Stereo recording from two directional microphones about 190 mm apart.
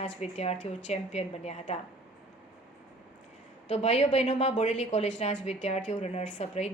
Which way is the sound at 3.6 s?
35° left (ahead or behind).